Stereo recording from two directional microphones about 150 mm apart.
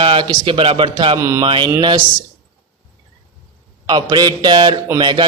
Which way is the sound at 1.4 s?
35° right (ahead or behind).